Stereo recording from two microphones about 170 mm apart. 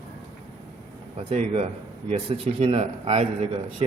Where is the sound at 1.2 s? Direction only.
35° right (ahead or behind).